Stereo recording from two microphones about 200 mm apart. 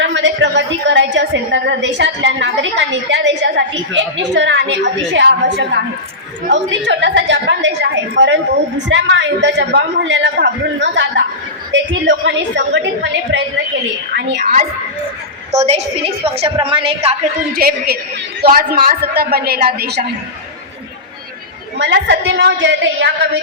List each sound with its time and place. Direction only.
0.0 s a woman's voice: 65° right (ahead or behind)
14.1 s a man's voice: 55° right (ahead or behind)
15.5 s a woman's voice: 30° right (ahead or behind)
17.5 s a man's voice: 45° right (ahead or behind)
21.8 s a woman's voice: 65° right (ahead or behind)